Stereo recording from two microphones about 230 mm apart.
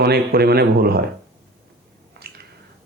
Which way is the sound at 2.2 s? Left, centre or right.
Right.